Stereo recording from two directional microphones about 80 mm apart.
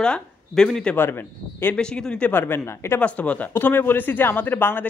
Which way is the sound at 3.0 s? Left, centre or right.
Centre.